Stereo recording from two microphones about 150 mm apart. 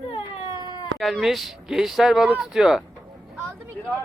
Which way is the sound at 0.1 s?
30° left (ahead or behind).